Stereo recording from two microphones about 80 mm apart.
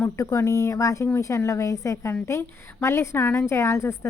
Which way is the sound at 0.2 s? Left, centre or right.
Left.